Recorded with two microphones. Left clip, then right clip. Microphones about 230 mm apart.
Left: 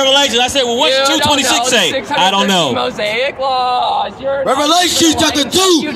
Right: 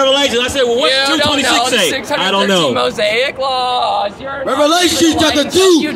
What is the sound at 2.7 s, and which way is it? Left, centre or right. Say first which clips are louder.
A man's voice: right 2 dB; right.